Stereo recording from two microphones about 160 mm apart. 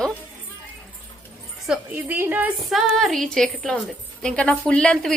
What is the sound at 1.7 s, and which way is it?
A woman's voice, 10° right (ahead or behind).